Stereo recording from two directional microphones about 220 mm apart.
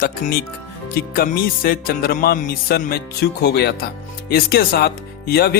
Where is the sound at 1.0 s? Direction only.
40° left (ahead or behind).